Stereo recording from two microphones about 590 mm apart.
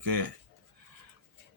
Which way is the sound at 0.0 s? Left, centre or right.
Right.